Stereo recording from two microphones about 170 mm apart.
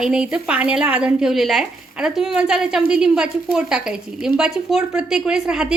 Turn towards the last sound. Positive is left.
turn(degrees=-5)  # may be behind; listen again after turning